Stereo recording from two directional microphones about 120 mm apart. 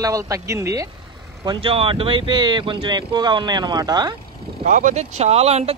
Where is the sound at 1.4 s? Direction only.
45° right (ahead or behind).